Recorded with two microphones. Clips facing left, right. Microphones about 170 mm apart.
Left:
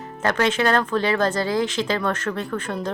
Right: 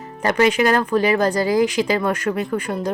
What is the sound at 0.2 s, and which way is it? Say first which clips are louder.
Speech: right 4 dB; 10° right (ahead or behind).